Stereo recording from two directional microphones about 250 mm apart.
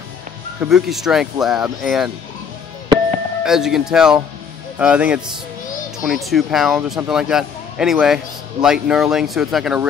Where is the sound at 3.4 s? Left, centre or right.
Centre.